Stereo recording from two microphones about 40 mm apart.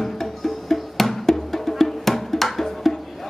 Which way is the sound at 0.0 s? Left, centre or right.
Centre.